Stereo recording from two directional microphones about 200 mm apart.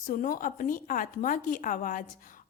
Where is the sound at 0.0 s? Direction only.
45° left (ahead or behind).